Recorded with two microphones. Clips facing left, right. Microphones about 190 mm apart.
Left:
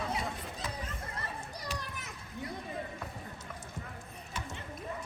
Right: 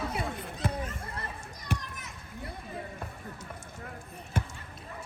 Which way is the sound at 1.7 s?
60° right (ahead or behind).